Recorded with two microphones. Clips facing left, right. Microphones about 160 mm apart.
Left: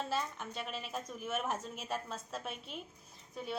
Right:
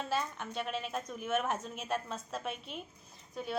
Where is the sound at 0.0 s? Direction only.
Centre (ahead or behind).